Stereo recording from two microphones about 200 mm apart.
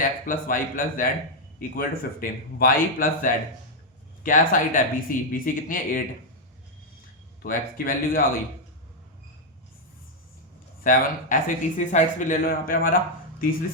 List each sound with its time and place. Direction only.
0.0 s speech: 45° left (ahead or behind)
7.4 s speech: 45° left (ahead or behind)
10.8 s speech: 40° left (ahead or behind)